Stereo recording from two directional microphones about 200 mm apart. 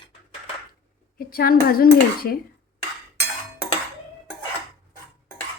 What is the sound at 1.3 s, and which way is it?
Dishes, 50° left (ahead or behind).